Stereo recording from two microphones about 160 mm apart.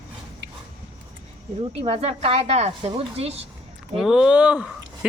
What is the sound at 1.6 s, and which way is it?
Speech, 35° right (ahead or behind).